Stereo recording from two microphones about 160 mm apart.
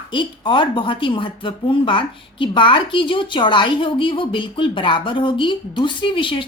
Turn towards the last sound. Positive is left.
turn(degrees=30)  # may be behind; listen again after turning